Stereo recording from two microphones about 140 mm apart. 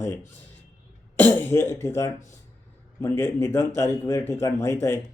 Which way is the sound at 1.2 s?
20° left (ahead or behind).